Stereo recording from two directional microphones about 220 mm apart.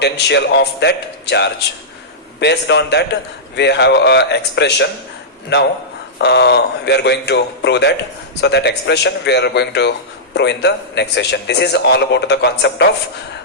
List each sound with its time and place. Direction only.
0.0 s a man's voice: 50° left (ahead or behind)
6.1 s a man's voice: 50° left (ahead or behind)